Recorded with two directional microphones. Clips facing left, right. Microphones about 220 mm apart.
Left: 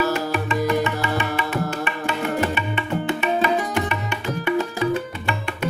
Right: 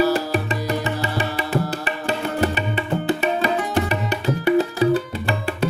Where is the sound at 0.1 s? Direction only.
35° right (ahead or behind).